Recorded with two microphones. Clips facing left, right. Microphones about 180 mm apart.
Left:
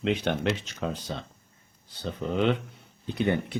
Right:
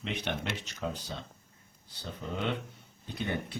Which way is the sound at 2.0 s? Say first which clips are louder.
Left 9 dB; 90° left.